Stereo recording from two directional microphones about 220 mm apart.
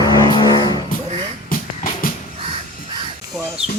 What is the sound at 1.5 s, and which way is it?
Music, 40° left (ahead or behind).